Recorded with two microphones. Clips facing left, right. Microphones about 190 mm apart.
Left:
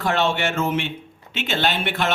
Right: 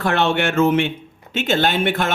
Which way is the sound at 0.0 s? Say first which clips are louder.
Right 3 dB; 60° right (ahead or behind).